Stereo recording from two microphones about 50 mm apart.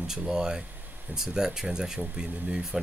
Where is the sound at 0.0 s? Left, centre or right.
Centre.